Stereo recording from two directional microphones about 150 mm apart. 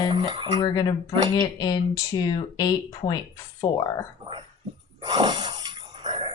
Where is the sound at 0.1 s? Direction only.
30° right (ahead or behind).